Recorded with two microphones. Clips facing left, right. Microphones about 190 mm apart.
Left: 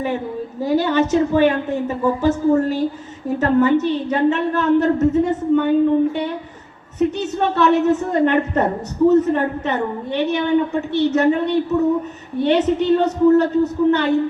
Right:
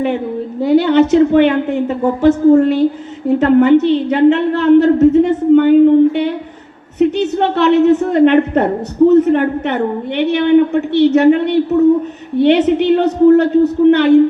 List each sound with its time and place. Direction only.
0.6 s a woman's voice: 65° right (ahead or behind)